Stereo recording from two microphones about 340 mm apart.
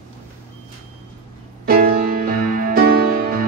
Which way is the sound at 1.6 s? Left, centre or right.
Right.